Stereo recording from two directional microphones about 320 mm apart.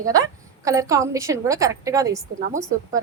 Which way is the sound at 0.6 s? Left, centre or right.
Centre.